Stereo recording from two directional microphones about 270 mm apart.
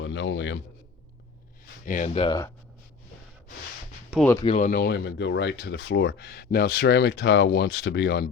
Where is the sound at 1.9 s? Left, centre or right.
Left.